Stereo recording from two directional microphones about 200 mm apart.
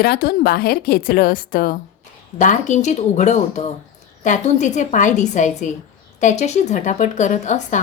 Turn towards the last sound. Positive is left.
turn(degrees=40)  # may be behind; listen again after turning